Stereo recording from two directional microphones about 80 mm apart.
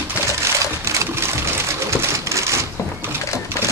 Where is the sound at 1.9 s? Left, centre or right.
Right.